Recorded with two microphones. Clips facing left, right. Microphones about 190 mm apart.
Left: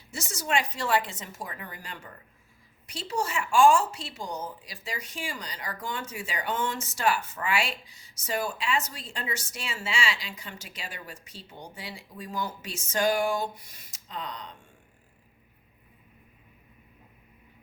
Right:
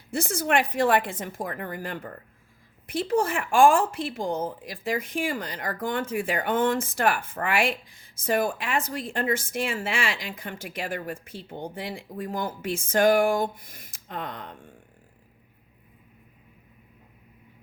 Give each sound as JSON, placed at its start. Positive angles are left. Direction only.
{"t": 0.1, "sound": "a woman's voice", "side_deg": -55}